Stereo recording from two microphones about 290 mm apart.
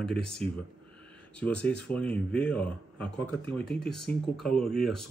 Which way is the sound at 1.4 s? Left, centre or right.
Centre.